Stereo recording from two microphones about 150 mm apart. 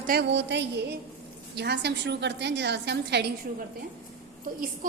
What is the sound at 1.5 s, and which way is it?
Speech, 90° right.